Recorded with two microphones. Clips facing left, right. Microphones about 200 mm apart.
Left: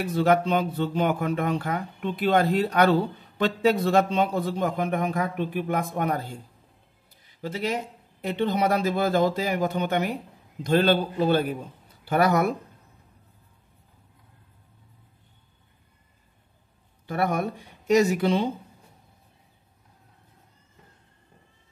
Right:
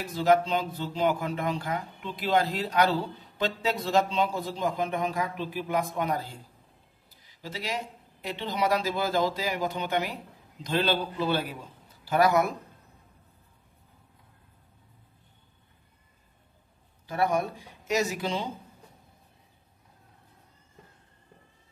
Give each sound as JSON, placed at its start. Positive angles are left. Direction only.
{"t": 0.0, "sound": "speech", "side_deg": 60}
{"t": 7.4, "sound": "a man's voice", "side_deg": 55}
{"t": 17.0, "sound": "speech", "side_deg": 60}